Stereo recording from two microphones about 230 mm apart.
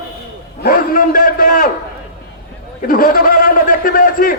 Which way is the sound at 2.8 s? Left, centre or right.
Left.